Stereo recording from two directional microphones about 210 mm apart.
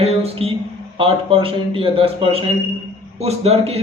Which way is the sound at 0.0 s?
30° right (ahead or behind).